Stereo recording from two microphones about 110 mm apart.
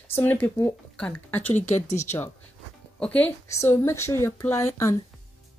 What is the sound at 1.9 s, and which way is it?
Speech, 90° left.